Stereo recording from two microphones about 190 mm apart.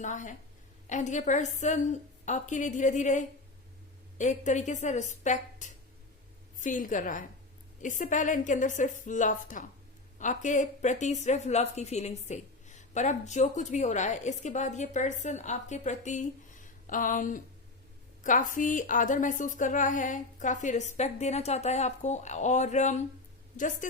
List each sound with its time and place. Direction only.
0.0 s a woman's voice: 40° left (ahead or behind)